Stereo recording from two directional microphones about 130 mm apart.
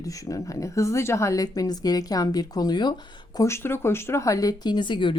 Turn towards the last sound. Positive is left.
turn(degrees=40)  # may be behind; listen again after turning